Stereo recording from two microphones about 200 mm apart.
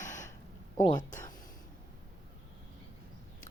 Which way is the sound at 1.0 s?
40° left (ahead or behind).